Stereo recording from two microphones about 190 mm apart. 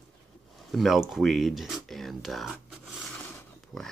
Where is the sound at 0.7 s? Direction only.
Centre (ahead or behind).